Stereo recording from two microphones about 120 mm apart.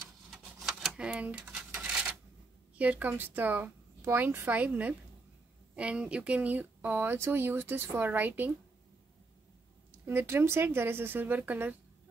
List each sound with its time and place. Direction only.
0.3 s a sound: centre (ahead or behind)
2.8 s speech: 15° right (ahead or behind)
10.0 s speech: 20° right (ahead or behind)